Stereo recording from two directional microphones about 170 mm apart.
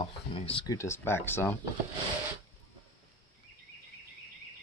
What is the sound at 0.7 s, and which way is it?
Speech, 15° left (ahead or behind).